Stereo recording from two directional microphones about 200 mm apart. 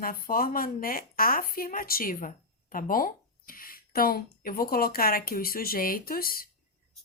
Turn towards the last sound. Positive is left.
turn(degrees=45)  # may be behind; listen again after turning